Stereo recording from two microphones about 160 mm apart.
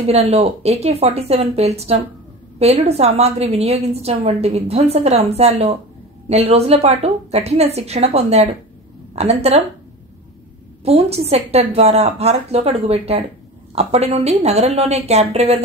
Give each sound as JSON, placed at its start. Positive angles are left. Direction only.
{"t": 0.0, "sound": "a woman's voice", "side_deg": -40}
{"t": 10.8, "sound": "a woman's voice", "side_deg": -40}